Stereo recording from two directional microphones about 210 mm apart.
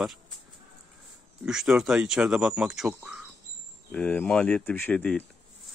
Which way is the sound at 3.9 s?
5° left (ahead or behind).